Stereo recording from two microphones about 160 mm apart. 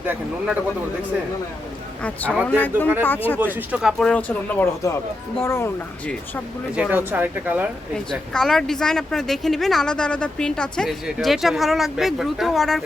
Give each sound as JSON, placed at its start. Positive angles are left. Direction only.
{"t": 0.0, "sound": "speech", "side_deg": -10}
{"t": 2.3, "sound": "speech", "side_deg": 0}
{"t": 3.0, "sound": "speech", "side_deg": 10}
{"t": 3.3, "sound": "speech", "side_deg": -10}
{"t": 6.7, "sound": "speech", "side_deg": -10}
{"t": 8.1, "sound": "speech", "side_deg": 5}